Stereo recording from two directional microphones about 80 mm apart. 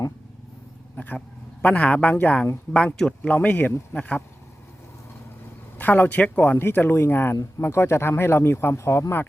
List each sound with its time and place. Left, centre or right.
0.9 s dog: left
1.6 s a man's voice: centre
3.2 s speech: left
5.7 s speech: left